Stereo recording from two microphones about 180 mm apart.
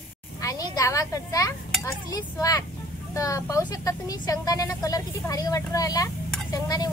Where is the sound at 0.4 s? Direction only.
20° left (ahead or behind).